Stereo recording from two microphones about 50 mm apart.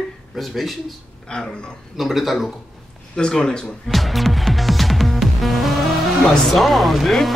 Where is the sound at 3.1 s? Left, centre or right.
Centre.